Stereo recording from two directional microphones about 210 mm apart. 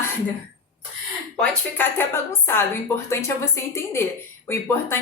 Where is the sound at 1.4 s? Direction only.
10° left (ahead or behind).